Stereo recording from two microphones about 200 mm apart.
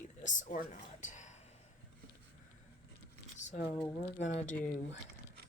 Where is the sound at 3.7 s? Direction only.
15° left (ahead or behind).